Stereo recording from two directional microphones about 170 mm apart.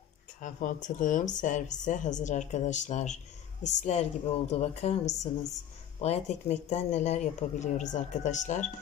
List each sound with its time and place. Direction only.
0.4 s a woman's voice: 50° left (ahead or behind)